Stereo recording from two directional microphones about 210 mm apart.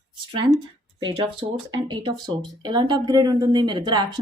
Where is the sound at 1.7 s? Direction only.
20° right (ahead or behind).